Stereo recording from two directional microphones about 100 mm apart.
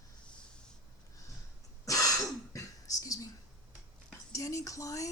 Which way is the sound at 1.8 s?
35° left (ahead or behind).